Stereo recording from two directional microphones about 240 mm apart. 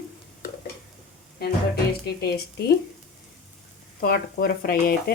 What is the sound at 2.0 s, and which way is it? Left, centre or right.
Stir, left.